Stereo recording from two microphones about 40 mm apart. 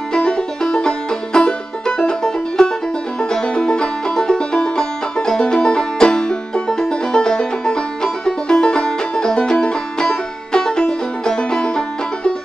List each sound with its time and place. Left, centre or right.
0.1 s music: left